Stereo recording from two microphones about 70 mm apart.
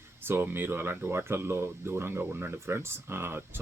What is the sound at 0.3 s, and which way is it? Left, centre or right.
Speech, right.